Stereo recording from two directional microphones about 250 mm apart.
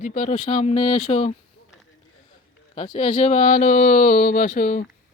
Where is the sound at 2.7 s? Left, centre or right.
Left.